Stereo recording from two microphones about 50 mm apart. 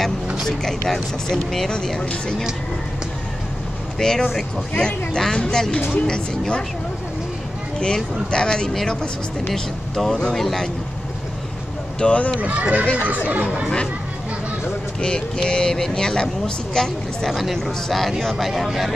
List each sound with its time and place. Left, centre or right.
0.5 s speech: centre
4.0 s speech: centre
7.8 s speech: centre
9.5 s speech: centre
12.0 s speech: left
12.4 s speech: right
15.0 s speech: centre
17.3 s speech: centre